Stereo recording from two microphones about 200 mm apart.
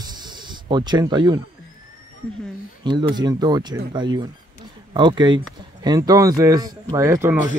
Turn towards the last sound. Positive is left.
turn(degrees=-15)  # may be behind; listen again after turning